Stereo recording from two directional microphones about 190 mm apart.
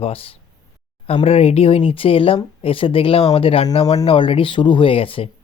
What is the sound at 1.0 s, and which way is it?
Speech, 30° left (ahead or behind).